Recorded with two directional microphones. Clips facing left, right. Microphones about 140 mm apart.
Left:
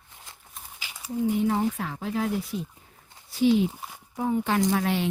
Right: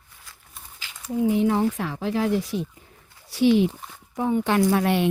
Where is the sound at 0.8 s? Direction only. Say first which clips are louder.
Right 1 dB; 15° left (ahead or behind).